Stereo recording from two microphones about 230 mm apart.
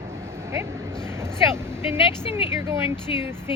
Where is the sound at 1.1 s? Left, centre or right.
Centre.